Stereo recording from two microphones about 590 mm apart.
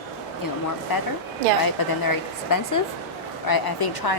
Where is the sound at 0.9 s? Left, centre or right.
Left.